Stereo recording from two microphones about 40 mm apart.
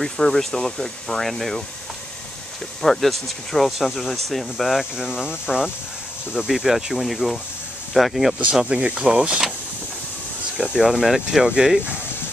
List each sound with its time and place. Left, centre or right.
0.0 s speech: centre
2.8 s speech: centre
5.2 s speech: centre
6.4 s speech: centre
8.4 s speech: right
10.8 s speech: centre